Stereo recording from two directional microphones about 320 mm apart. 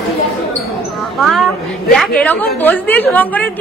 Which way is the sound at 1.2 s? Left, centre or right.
Centre.